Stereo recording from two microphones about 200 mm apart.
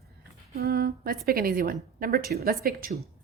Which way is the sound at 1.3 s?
50° right (ahead or behind).